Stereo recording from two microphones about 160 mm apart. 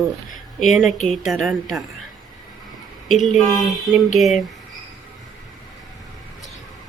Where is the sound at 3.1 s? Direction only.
Centre (ahead or behind).